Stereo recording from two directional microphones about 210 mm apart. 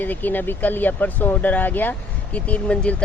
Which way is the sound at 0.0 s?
10° left (ahead or behind).